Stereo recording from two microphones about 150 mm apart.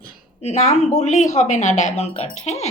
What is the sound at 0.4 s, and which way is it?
A woman's voice, 50° left (ahead or behind).